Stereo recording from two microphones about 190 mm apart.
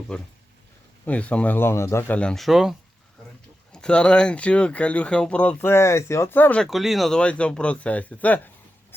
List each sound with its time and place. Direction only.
0.1 s speech: 5° left (ahead or behind)